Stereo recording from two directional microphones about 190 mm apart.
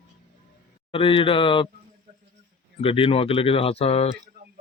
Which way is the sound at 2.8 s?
30° left (ahead or behind).